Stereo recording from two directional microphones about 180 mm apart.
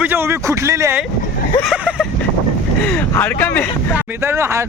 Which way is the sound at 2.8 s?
10° left (ahead or behind).